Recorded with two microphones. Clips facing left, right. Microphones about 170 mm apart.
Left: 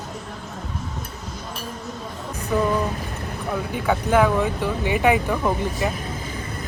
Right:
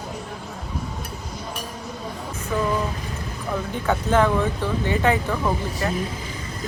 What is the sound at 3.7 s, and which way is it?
Speech, 10° left (ahead or behind).